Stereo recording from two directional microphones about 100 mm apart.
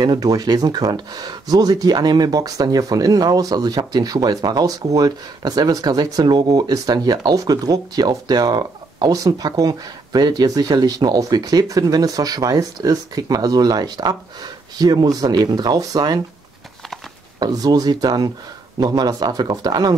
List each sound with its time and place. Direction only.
0.0 s speech: 40° right (ahead or behind)
17.4 s speech: 40° right (ahead or behind)